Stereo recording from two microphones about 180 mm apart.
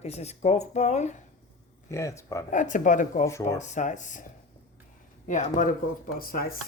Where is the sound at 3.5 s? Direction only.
40° left (ahead or behind).